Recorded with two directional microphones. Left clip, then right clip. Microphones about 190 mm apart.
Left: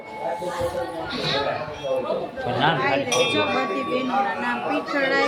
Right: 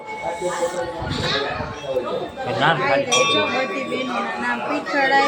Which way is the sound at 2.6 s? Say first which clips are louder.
Right 3 dB; 5° left (ahead or behind).